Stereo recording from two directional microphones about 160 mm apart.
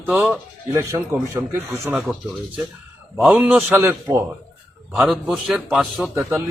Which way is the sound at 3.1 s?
5° right (ahead or behind).